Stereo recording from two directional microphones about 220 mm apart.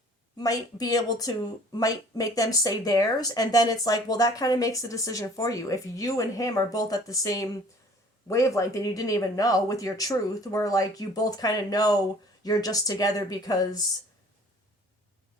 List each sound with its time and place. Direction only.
0.3 s speech: 15° left (ahead or behind)